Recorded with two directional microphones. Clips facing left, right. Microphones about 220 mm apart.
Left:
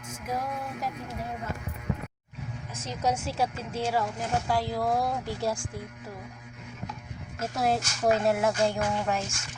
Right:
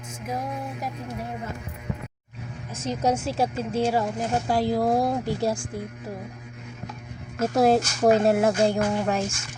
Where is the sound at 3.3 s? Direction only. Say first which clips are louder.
Right 5 dB; 45° right (ahead or behind).